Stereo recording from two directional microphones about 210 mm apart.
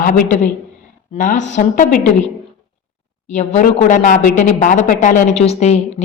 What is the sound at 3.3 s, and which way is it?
Speech, 35° left (ahead or behind).